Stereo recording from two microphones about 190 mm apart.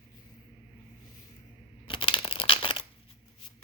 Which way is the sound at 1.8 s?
25° left (ahead or behind).